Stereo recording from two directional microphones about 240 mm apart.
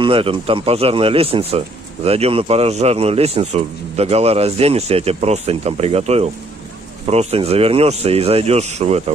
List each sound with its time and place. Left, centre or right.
0.0 s a man's voice: right